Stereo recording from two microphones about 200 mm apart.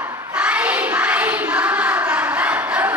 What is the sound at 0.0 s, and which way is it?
Child singing, 5° right (ahead or behind).